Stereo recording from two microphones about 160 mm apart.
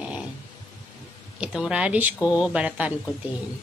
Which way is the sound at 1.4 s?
5° right (ahead or behind).